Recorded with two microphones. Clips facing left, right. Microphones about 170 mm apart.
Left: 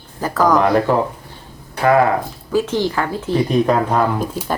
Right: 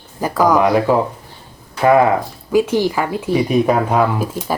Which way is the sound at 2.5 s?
10° right (ahead or behind).